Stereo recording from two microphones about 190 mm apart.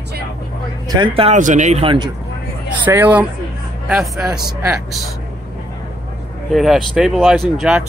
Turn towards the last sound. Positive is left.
turn(degrees=0)  # may be behind; listen again after turning